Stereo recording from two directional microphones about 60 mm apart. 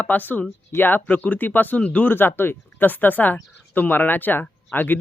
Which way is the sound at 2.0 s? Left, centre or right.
Left.